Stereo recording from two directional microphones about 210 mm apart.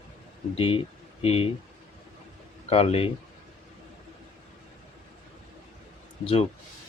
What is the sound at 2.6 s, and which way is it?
Speech, 30° left (ahead or behind).